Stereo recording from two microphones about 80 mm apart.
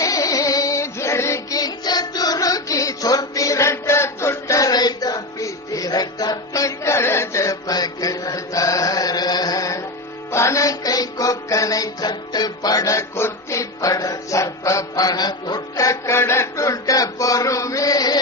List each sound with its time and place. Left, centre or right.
0.0 s music: left